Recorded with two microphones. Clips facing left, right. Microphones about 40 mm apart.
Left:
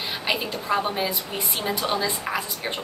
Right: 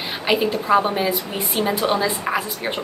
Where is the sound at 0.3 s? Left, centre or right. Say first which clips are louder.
Right 8 dB; centre.